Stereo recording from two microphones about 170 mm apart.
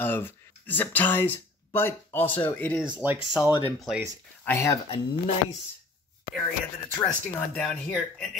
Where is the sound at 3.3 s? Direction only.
5° right (ahead or behind).